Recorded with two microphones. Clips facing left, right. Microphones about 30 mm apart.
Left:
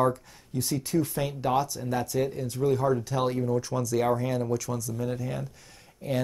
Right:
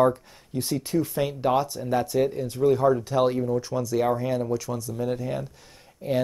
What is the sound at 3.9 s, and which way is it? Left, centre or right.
Speech, centre.